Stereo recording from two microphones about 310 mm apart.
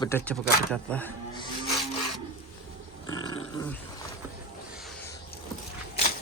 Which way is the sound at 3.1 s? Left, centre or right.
Centre.